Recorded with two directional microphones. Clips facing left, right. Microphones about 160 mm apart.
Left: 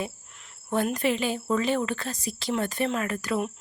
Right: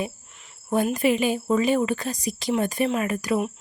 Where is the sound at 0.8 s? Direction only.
10° right (ahead or behind).